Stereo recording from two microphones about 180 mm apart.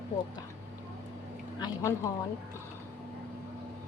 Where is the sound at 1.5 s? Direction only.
20° left (ahead or behind).